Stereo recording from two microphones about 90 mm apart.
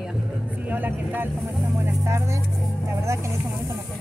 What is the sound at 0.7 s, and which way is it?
Speech, 20° right (ahead or behind).